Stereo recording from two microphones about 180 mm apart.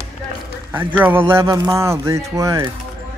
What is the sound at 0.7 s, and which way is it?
Speech, 10° right (ahead or behind).